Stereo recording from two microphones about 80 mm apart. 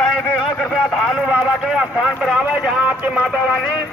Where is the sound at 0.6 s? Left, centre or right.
Centre.